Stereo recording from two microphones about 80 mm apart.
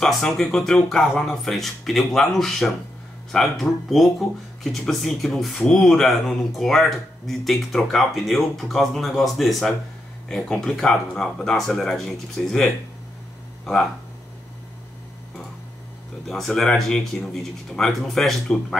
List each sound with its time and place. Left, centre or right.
0.0 s speech: centre
16.3 s speech: centre